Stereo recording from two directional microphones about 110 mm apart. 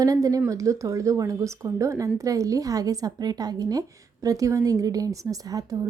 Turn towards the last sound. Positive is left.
turn(degrees=-35)  # may be behind; listen again after turning